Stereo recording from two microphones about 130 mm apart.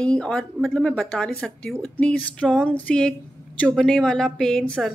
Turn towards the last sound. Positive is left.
turn(degrees=5)  # may be behind; listen again after turning